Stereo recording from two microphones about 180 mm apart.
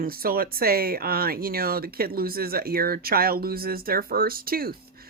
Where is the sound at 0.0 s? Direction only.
55° right (ahead or behind).